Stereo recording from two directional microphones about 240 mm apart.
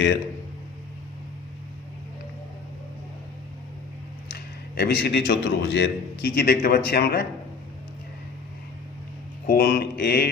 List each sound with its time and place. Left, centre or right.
4.3 s a man's voice: left
9.5 s a man's voice: left